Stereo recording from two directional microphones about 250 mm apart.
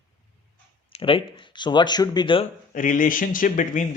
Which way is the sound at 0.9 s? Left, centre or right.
Left.